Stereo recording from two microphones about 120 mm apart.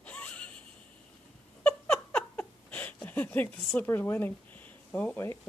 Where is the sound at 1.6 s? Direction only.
10° left (ahead or behind).